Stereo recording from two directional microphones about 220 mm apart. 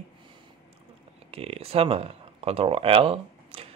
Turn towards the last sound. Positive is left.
turn(degrees=-25)  # may be behind; listen again after turning